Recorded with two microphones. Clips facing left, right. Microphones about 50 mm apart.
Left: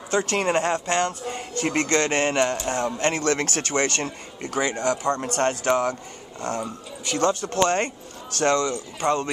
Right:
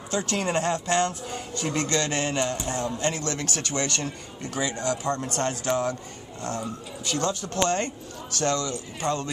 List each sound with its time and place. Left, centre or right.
0.1 s speech: left
1.5 s a man's voice: left